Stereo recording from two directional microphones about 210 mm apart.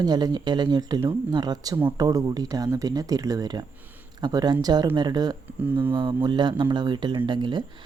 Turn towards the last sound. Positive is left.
turn(degrees=-20)  # may be behind; listen again after turning